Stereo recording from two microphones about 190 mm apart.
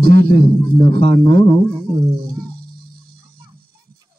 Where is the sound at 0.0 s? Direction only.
55° right (ahead or behind).